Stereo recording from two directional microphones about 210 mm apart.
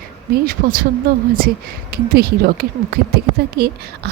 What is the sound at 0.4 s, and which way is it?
Speech, 45° right (ahead or behind).